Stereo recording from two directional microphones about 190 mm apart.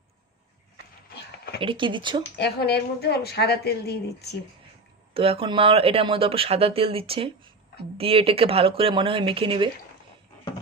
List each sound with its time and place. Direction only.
1.6 s speech: 25° right (ahead or behind)
2.4 s a woman's voice: 60° left (ahead or behind)
5.1 s speech: 30° right (ahead or behind)